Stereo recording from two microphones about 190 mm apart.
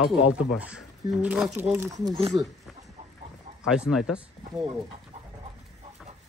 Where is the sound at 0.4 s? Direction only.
5° right (ahead or behind).